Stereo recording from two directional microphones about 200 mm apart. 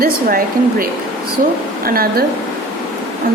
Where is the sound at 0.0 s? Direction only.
45° right (ahead or behind).